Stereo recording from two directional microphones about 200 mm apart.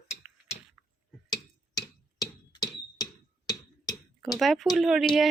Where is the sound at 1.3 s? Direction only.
20° left (ahead or behind).